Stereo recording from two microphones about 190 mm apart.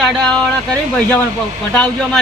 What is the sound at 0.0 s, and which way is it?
Speech, centre (ahead or behind).